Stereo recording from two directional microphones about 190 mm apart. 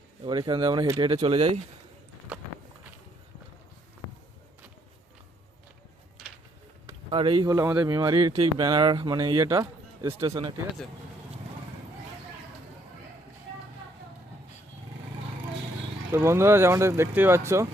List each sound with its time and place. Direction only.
0.3 s speech: 25° right (ahead or behind)
7.1 s speech: 30° right (ahead or behind)
7.5 s speech: 10° right (ahead or behind)
7.9 s speech: 20° right (ahead or behind)
16.1 s speech: 15° right (ahead or behind)